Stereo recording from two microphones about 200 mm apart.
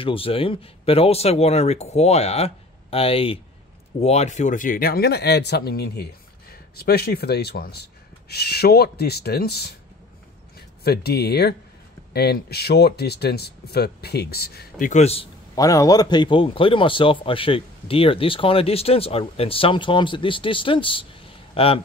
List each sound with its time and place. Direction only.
0.0 s a man's voice: 25° left (ahead or behind); by 9.7 s 55° left (ahead or behind)
10.8 s speech: 50° left (ahead or behind); by 15.2 s 30° left (ahead or behind)
15.5 s a man's voice: 15° left (ahead or behind)